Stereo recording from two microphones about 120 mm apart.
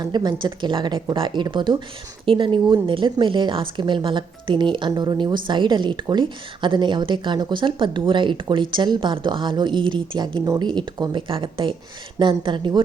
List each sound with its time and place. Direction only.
0.0 s a woman's voice: 35° right (ahead or behind)